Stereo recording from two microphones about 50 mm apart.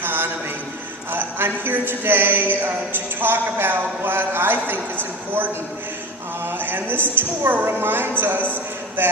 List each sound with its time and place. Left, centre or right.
0.0 s a sound: right
1.4 s a man's voice: right
6.4 s a man's voice: right